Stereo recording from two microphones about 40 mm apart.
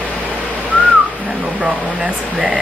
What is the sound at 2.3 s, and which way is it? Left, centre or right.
Speech, centre.